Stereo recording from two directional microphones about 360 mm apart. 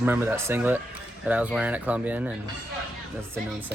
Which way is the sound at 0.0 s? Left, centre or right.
Centre.